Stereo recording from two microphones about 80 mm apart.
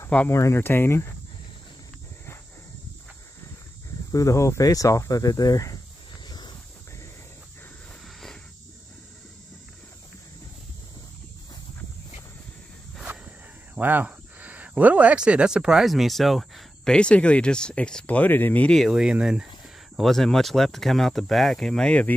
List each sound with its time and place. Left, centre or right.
0.3 s speech: left
4.1 s speech: left
6.2 s a sound: left
13.0 s walk: centre
13.7 s speech: right; by 16.9 s centre
16.9 s speech: centre
18.9 s speech: centre
20.0 s speech: centre